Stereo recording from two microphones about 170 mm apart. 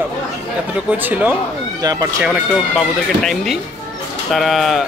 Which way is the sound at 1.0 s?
10° right (ahead or behind).